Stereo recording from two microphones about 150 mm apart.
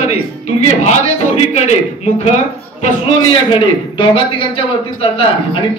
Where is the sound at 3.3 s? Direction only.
35° left (ahead or behind).